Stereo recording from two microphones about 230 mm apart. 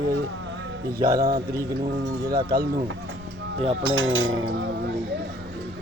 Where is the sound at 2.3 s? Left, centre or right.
Centre.